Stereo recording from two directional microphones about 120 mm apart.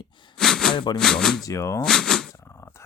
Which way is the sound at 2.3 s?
20° left (ahead or behind).